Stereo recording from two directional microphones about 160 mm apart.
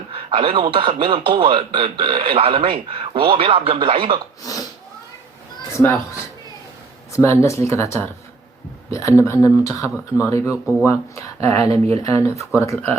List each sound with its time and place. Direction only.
0.1 s speech: 35° right (ahead or behind)
4.4 s speech: 20° left (ahead or behind)
5.7 s speech: 20° left (ahead or behind)